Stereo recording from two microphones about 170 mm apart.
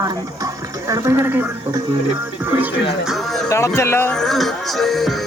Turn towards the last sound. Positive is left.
turn(degrees=0)  # may be behind; listen again after turning